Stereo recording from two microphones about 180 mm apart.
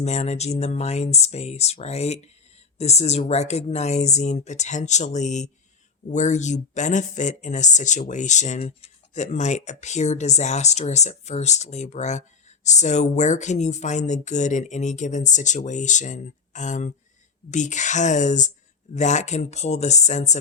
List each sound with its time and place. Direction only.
0.0 s speech: 40° left (ahead or behind)